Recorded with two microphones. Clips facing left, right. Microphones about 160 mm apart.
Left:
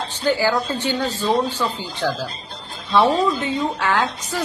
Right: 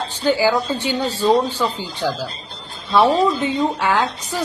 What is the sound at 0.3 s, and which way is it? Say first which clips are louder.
A woman's voice: right 2 dB; 15° right (ahead or behind).